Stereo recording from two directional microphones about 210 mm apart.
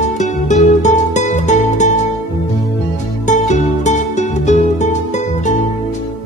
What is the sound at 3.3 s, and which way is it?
Music, 35° left (ahead or behind).